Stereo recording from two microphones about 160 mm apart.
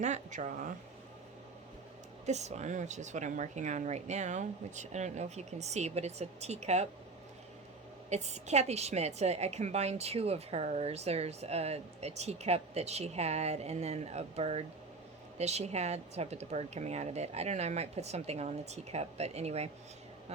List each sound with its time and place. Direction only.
0.0 s speech: 50° right (ahead or behind)
2.2 s speech: 45° right (ahead or behind)
8.1 s a woman's voice: 45° right (ahead or behind)